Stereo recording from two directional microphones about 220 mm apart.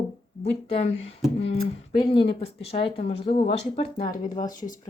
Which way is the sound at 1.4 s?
25° left (ahead or behind).